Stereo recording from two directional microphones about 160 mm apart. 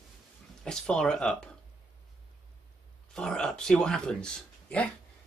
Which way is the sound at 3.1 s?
5° left (ahead or behind).